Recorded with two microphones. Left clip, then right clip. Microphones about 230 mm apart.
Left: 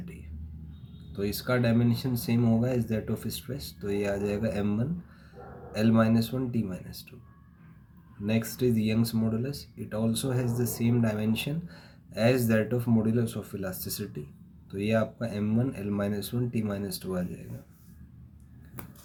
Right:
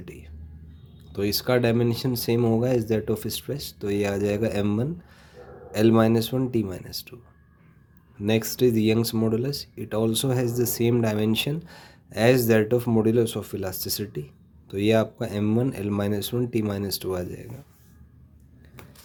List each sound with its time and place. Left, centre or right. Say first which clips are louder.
1.1 s speech: right 6 dB; right
8.2 s speech: right 7 dB; right